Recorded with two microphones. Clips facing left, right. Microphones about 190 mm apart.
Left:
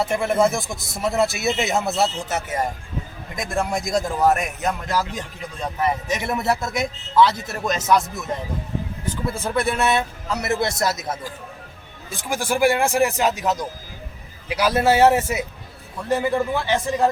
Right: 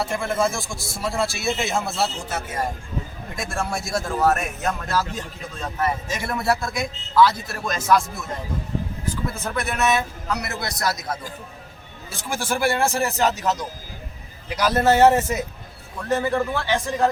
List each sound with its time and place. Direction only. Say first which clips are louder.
0.0 s a man's voice: left 4 dB; 20° left (ahead or behind)
12.1 s speech: left 2 dB; 15° left (ahead or behind)